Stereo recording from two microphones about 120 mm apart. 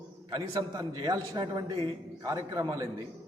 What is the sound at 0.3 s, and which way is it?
A man's voice, 35° right (ahead or behind).